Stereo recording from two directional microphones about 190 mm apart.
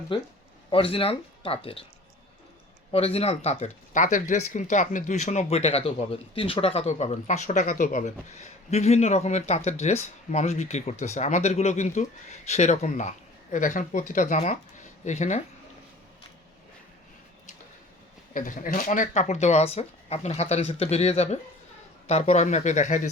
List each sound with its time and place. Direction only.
0.1 s speech: 25° left (ahead or behind)
2.9 s speech: 30° left (ahead or behind)
18.3 s speech: 45° left (ahead or behind)